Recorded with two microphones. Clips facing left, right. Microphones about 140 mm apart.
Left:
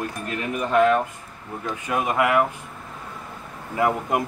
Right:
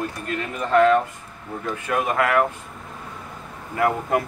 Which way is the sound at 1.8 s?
20° left (ahead or behind).